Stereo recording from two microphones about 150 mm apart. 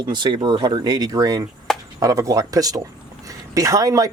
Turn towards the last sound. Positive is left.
turn(degrees=-25)  # may be behind; listen again after turning